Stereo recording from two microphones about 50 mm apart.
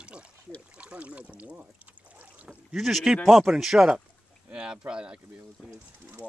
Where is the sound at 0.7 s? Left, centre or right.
Right.